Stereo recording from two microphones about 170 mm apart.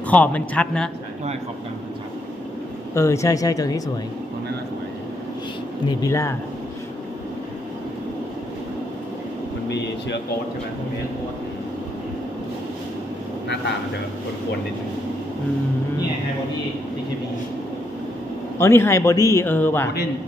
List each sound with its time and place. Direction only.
0.1 s a man's voice: 10° left (ahead or behind)
2.9 s speech: 15° left (ahead or behind)
5.9 s a man's voice: 15° left (ahead or behind)
18.6 s a man's voice: 15° left (ahead or behind)